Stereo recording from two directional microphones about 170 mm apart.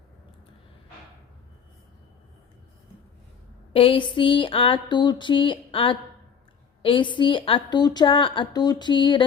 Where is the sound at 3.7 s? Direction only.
30° left (ahead or behind).